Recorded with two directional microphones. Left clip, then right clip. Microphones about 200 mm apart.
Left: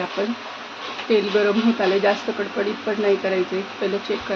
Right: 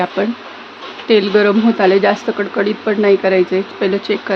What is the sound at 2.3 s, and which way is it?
Speech, 70° right (ahead or behind).